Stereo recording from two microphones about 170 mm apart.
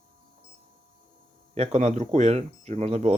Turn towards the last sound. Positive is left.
turn(degrees=-40)  # may be behind; listen again after turning